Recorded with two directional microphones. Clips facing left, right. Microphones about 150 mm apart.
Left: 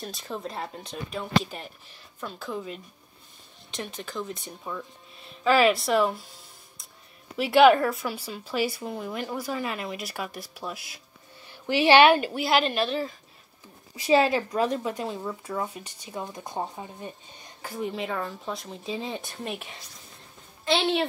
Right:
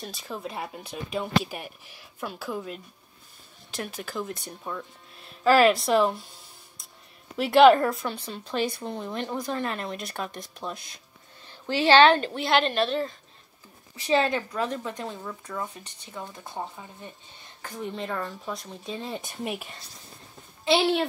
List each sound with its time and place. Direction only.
0.0 s a woman's voice: centre (ahead or behind)
7.3 s a woman's voice: centre (ahead or behind); by 16.7 s 20° left (ahead or behind)
17.6 s a woman's voice: 5° left (ahead or behind); by 20.9 s 10° right (ahead or behind)